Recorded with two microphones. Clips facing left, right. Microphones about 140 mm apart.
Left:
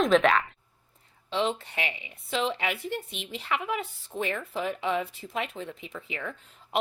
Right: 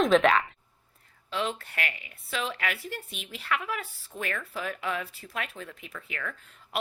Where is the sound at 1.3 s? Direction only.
20° left (ahead or behind).